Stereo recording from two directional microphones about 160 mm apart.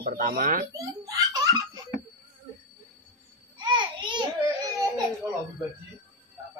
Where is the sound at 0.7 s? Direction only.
20° right (ahead or behind).